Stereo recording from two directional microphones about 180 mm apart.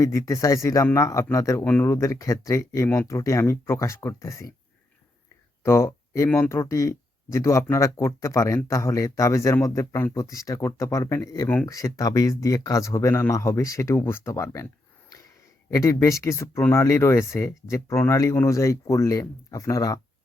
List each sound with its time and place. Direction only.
0.0 s speech: 15° left (ahead or behind)
5.6 s speech: 15° left (ahead or behind)
15.7 s speech: 15° left (ahead or behind)